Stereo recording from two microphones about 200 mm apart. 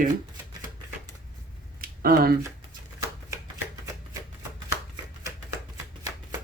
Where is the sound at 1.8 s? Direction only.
50° right (ahead or behind).